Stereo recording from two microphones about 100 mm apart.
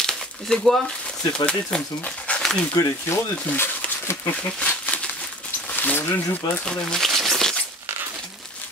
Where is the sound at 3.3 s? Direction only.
15° left (ahead or behind).